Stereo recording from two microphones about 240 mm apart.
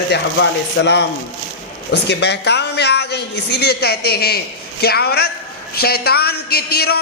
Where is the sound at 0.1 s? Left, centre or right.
Left.